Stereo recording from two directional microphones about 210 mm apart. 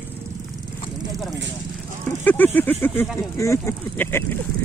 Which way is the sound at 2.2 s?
10° left (ahead or behind).